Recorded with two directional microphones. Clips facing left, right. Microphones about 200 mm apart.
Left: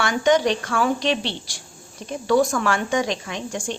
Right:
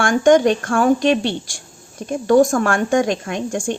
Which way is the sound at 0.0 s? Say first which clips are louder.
Right 6 dB; 50° right (ahead or behind).